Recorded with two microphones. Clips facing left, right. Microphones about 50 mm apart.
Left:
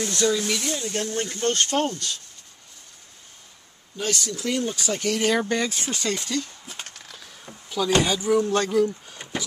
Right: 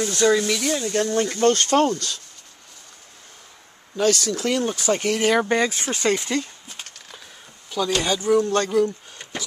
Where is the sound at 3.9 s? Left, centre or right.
Right.